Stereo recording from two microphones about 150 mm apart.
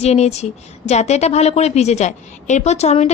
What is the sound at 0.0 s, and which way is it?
A woman's voice, 45° left (ahead or behind).